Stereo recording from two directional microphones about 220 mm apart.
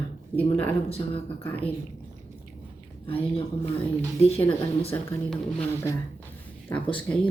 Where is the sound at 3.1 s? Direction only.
25° left (ahead or behind).